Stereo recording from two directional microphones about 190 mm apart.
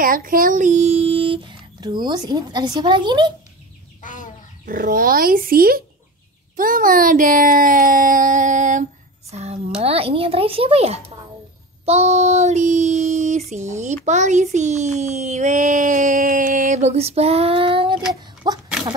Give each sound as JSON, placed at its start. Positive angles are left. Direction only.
{"t": 0.0, "sound": "a child's voice", "side_deg": -45}
{"t": 4.0, "sound": "chicken", "side_deg": 45}
{"t": 4.6, "sound": "a child's voice", "side_deg": -45}
{"t": 11.8, "sound": "child singing", "side_deg": -35}
{"t": 14.0, "sound": "a child's voice", "side_deg": -40}
{"t": 18.4, "sound": "a sound", "side_deg": -20}